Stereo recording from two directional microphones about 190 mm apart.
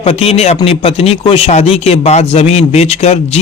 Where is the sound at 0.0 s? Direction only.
30° left (ahead or behind).